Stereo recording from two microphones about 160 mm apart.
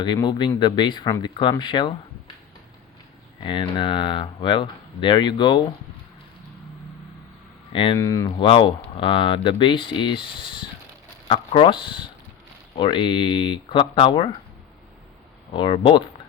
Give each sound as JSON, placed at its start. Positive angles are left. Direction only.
{"t": 0.0, "sound": "speech", "side_deg": 25}
{"t": 3.4, "sound": "speech", "side_deg": 30}
{"t": 7.7, "sound": "speech", "side_deg": 35}
{"t": 7.9, "sound": "speech", "side_deg": 20}
{"t": 15.5, "sound": "speech", "side_deg": 30}